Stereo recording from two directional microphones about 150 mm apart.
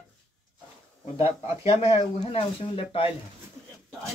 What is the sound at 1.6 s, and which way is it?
Speech, 40° left (ahead or behind).